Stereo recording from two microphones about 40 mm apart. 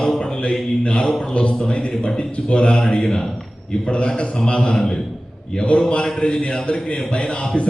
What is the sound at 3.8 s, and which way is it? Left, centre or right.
Speech, left.